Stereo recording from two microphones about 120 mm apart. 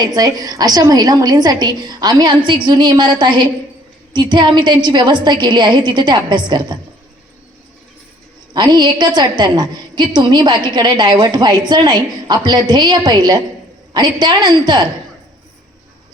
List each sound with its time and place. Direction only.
0.0 s a woman's voice: 35° right (ahead or behind)
8.5 s a woman's voice: 35° right (ahead or behind)